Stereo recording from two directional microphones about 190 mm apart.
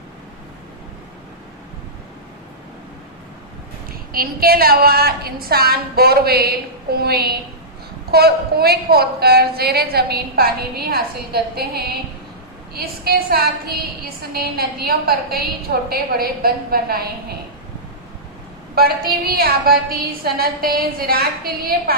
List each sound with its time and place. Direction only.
4.1 s a woman's voice: 50° right (ahead or behind)
18.7 s a woman's voice: 55° right (ahead or behind)